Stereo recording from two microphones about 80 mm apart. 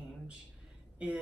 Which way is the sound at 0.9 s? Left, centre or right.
Centre.